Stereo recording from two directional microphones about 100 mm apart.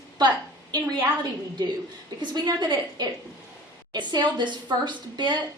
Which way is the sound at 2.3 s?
45° right (ahead or behind).